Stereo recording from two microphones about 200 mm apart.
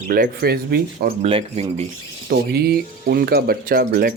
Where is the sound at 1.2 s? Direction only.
30° right (ahead or behind).